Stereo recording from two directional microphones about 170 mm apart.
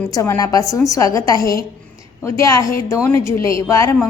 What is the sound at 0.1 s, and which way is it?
A woman's voice, 20° left (ahead or behind).